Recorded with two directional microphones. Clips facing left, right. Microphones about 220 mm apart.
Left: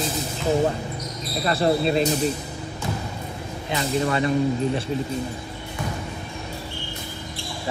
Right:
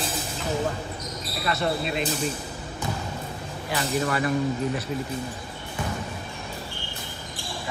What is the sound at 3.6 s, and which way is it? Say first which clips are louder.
Speech: left 3 dB; 25° left (ahead or behind).